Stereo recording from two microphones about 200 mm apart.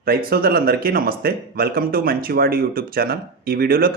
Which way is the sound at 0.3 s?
50° right (ahead or behind).